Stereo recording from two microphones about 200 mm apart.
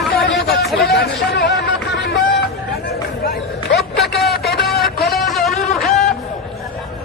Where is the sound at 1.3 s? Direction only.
60° left (ahead or behind).